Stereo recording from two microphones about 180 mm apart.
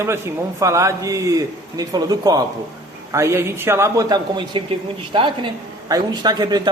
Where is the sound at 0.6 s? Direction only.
15° right (ahead or behind).